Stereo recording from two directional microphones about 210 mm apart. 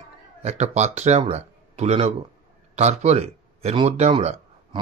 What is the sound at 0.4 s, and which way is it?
A man's voice, 30° right (ahead or behind).